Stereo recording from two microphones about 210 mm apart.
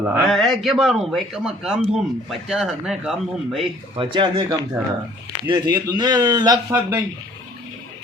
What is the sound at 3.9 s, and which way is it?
Speech, 25° right (ahead or behind).